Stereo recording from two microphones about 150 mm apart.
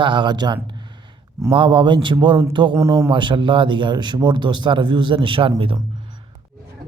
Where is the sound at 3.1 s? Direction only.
35° right (ahead or behind).